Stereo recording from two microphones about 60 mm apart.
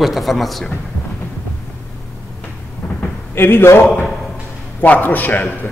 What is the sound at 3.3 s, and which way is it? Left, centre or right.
Speech, left.